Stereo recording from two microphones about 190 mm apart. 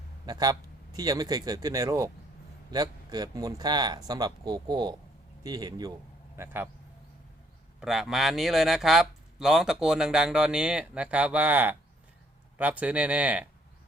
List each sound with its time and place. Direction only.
0.3 s speech: 20° right (ahead or behind)
7.8 s speech: centre (ahead or behind)